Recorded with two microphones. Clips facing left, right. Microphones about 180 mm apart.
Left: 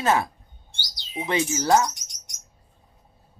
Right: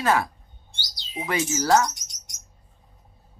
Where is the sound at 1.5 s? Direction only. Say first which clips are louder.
Right 1 dB; 20° left (ahead or behind).